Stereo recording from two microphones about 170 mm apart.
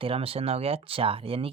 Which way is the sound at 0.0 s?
35° right (ahead or behind).